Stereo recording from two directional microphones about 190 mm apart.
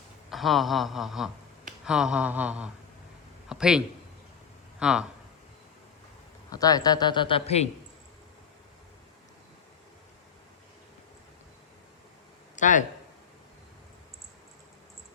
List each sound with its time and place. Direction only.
0.3 s speech: centre (ahead or behind)
6.5 s a man's voice: 20° left (ahead or behind)
12.5 s a sound: 40° left (ahead or behind)